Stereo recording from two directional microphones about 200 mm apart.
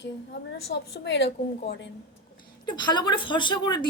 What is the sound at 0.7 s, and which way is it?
Speech, 55° left (ahead or behind).